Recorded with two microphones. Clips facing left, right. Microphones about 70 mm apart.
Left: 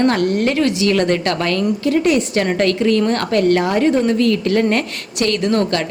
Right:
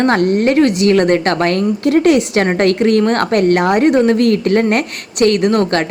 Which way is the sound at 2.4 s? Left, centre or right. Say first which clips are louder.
Right 3 dB; right.